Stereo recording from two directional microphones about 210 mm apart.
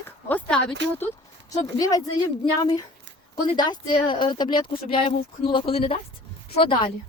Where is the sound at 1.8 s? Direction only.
15° left (ahead or behind).